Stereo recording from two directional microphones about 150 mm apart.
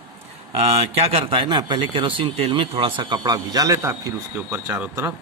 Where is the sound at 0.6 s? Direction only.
45° right (ahead or behind); by 5.1 s 15° right (ahead or behind).